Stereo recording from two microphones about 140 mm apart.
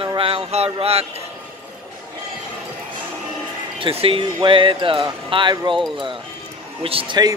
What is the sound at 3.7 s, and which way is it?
Speech, 40° right (ahead or behind).